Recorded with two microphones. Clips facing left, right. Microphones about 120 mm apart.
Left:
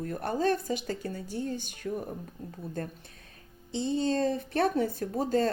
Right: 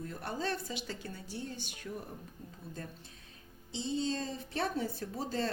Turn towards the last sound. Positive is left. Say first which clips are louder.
# left 8 dB
turn(degrees=45)  # may be behind; listen again after turning